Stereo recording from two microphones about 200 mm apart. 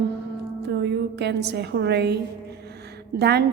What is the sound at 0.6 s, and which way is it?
A woman's voice, 60° right (ahead or behind).